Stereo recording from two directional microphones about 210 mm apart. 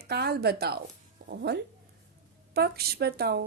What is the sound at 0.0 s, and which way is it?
A woman's voice, 50° right (ahead or behind).